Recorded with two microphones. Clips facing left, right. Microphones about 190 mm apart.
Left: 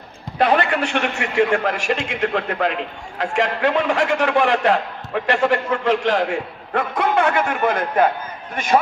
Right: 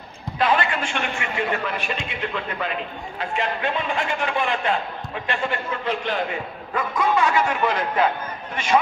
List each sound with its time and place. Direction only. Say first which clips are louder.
0.4 s a man's voice: left 4 dB; 60° left (ahead or behind)